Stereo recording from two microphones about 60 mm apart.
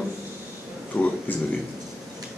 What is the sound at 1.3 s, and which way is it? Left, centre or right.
Speech, left.